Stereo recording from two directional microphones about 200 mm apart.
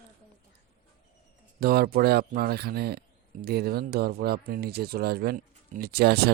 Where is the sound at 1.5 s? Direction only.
50° right (ahead or behind).